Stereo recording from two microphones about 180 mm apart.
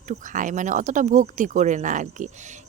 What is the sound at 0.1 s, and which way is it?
Speech, 45° right (ahead or behind).